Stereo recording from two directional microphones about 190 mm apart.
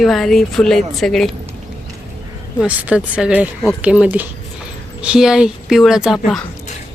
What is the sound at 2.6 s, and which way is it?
A woman's voice, 5° right (ahead or behind).